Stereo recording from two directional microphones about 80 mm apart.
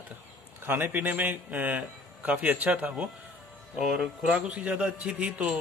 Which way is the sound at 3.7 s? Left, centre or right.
Centre.